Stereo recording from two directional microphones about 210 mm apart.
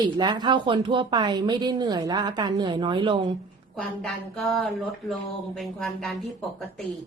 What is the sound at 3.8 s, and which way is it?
A woman's voice, centre (ahead or behind).